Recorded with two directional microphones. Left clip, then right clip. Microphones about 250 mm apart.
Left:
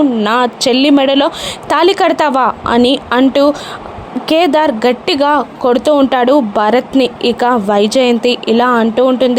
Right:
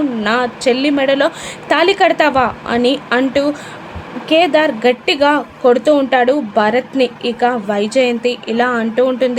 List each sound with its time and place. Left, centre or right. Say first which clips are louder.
0.2 s speech: left 4 dB; left